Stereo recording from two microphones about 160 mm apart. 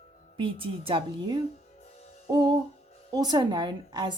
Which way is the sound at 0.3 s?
35° right (ahead or behind).